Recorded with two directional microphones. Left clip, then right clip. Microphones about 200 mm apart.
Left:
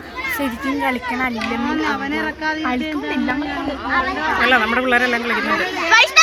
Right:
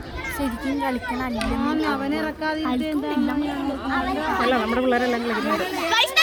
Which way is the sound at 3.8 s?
55° right (ahead or behind).